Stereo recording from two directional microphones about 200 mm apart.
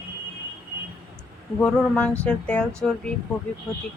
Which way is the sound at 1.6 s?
5° left (ahead or behind).